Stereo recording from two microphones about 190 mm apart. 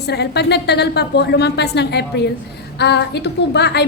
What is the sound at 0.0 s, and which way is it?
A woman's voice, 60° left (ahead or behind).